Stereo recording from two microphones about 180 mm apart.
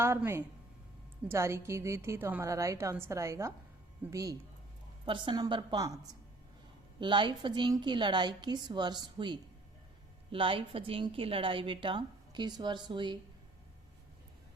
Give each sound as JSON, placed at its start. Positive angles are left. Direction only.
{"t": 0.0, "sound": "a woman's voice", "side_deg": -15}
{"t": 7.0, "sound": "a woman's voice", "side_deg": -25}